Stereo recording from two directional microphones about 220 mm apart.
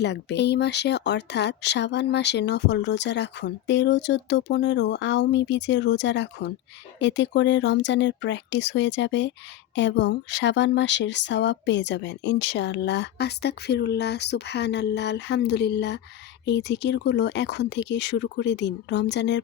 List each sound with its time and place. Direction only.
0.0 s speech: 50° left (ahead or behind)